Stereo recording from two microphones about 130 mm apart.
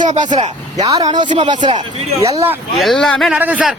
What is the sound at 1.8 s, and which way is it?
Speech, 50° right (ahead or behind).